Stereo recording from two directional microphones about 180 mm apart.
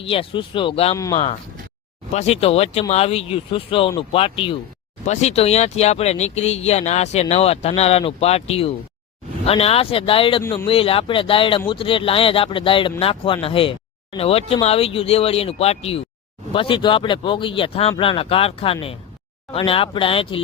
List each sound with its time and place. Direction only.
0.0 s speech: 30° left (ahead or behind)